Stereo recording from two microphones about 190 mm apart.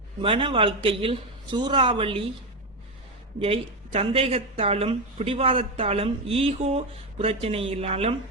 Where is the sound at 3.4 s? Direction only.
30° right (ahead or behind).